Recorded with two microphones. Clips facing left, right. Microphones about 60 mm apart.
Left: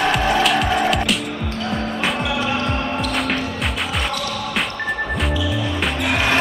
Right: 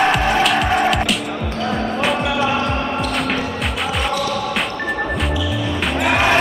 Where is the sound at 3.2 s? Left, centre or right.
Centre.